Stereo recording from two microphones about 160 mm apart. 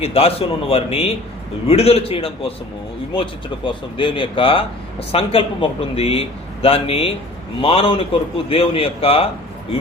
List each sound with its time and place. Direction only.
0.0 s speech: 35° left (ahead or behind)